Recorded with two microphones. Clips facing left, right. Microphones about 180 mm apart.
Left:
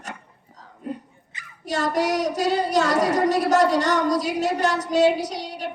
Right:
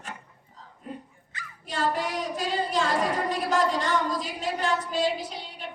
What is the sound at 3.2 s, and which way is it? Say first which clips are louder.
Child singing: left 7 dB; 75° left (ahead or behind).